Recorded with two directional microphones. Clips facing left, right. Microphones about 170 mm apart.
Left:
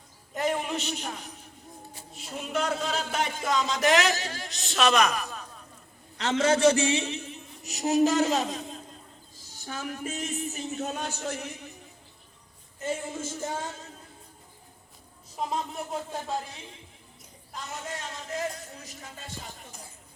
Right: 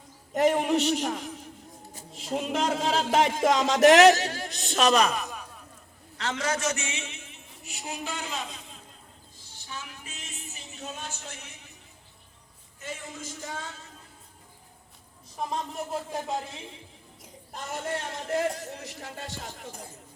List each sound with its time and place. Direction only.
0.3 s speech: 70° right (ahead or behind); by 5.3 s 25° right (ahead or behind)
6.1 s a man's voice: 25° left (ahead or behind); by 10.9 s 40° left (ahead or behind)
10.9 s music: 50° left (ahead or behind)
12.8 s music: 50° left (ahead or behind)
15.4 s speech: 10° left (ahead or behind)
17.5 s speech: 55° right (ahead or behind); by 19.8 s 75° right (ahead or behind)